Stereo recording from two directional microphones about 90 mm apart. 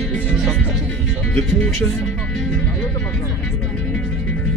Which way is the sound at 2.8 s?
10° left (ahead or behind).